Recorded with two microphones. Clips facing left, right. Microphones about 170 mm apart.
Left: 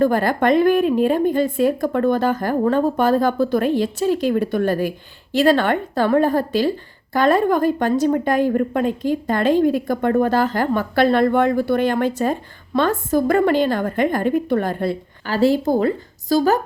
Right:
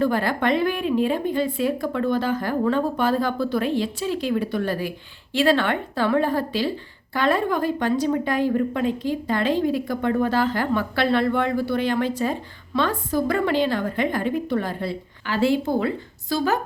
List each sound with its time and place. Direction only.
0.0 s speech: 45° left (ahead or behind)
15.4 s a woman's voice: 40° left (ahead or behind)